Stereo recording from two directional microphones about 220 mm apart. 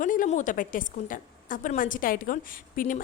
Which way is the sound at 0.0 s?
35° left (ahead or behind).